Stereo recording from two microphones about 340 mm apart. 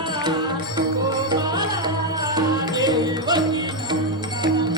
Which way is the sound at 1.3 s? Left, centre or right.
Centre.